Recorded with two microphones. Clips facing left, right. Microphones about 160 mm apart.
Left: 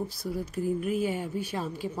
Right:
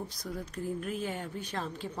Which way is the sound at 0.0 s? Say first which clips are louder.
Left 6 dB; 5° left (ahead or behind).